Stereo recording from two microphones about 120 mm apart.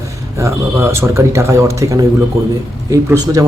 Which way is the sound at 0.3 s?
25° right (ahead or behind).